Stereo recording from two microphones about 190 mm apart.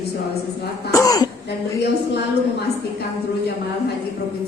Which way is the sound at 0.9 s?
20° left (ahead or behind).